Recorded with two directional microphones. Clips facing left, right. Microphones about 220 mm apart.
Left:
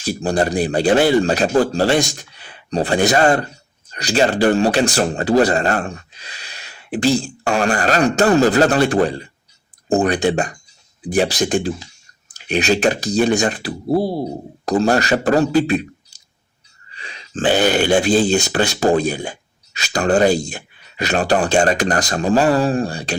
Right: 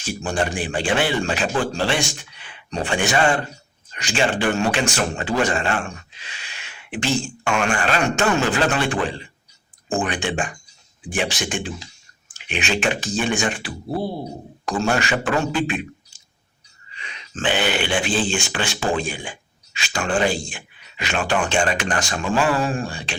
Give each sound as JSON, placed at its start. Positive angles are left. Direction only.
{"t": 0.0, "sound": "speech", "side_deg": 35}